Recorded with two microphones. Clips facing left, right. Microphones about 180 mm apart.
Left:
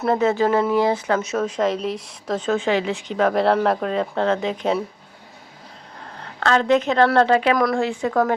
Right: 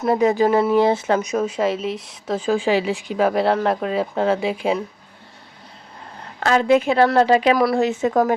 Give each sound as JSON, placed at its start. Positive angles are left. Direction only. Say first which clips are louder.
{"t": 0.1, "sound": "speech", "louder": "right 2 dB", "side_deg": -15}
{"t": 6.4, "sound": "speech", "louder": "right 2 dB", "side_deg": -10}
{"t": 7.8, "sound": "speech", "louder": "right 2 dB", "side_deg": -20}